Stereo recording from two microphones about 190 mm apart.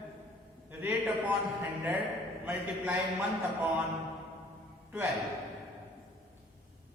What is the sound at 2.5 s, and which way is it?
A man's voice, 10° right (ahead or behind).